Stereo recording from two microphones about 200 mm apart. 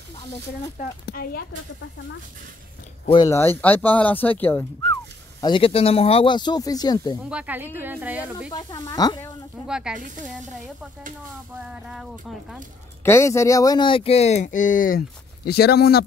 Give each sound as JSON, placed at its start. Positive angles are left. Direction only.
{"t": 0.7, "sound": "speech", "side_deg": 50}
{"t": 3.1, "sound": "speech", "side_deg": 20}
{"t": 5.4, "sound": "speech", "side_deg": 25}
{"t": 7.2, "sound": "speech", "side_deg": -5}
{"t": 8.5, "sound": "speech", "side_deg": 20}
{"t": 9.7, "sound": "speech", "side_deg": -5}
{"t": 9.9, "sound": "speech", "side_deg": -40}
{"t": 11.5, "sound": "speech", "side_deg": -5}
{"t": 13.0, "sound": "speech", "side_deg": 15}